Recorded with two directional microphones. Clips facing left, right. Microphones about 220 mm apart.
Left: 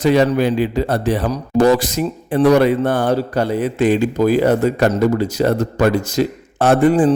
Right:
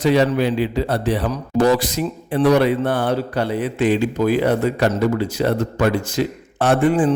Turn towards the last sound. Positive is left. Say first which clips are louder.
# left 3 dB
turn(degrees=40)  # may be behind; listen again after turning